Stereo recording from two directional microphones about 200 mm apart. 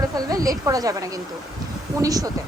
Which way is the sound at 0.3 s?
15° right (ahead or behind).